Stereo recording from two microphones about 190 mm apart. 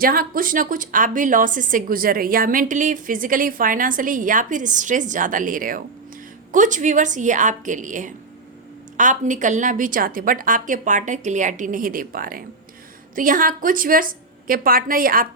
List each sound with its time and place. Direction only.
0.0 s a woman's voice: 50° right (ahead or behind)